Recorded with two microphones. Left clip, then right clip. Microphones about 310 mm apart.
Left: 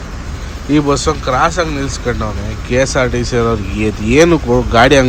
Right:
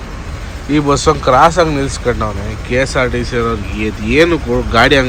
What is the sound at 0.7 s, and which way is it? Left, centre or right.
Speech, centre.